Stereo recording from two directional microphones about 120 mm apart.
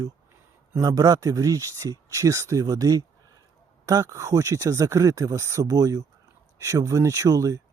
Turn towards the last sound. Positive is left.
turn(degrees=-30)  # may be behind; listen again after turning